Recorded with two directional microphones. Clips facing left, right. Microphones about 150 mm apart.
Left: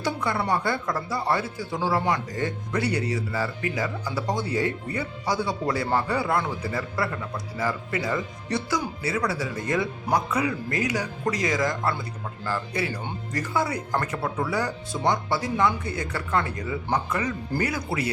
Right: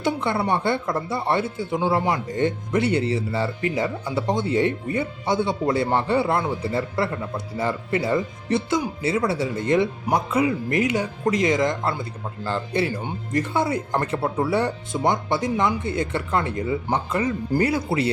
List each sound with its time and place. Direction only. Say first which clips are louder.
0.0 s speech: right 4 dB; 25° right (ahead or behind)